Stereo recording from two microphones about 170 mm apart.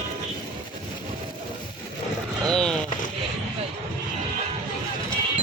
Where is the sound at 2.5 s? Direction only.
5° left (ahead or behind).